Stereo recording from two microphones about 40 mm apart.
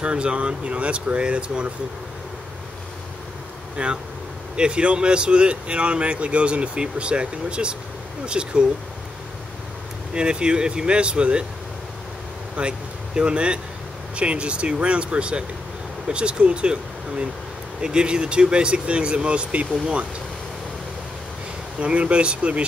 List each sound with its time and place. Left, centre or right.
0.0 s speech: right
3.7 s speech: right
10.1 s speech: right
12.5 s speech: right
17.8 s speech: right
21.7 s speech: right